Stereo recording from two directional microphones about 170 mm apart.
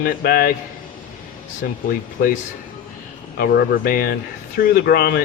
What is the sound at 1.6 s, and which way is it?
Speech, 55° left (ahead or behind).